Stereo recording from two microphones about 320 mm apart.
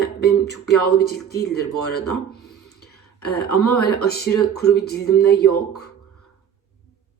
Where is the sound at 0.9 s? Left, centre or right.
Left.